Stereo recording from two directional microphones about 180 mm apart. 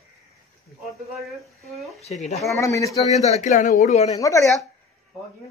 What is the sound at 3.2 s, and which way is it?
Speech, 40° left (ahead or behind).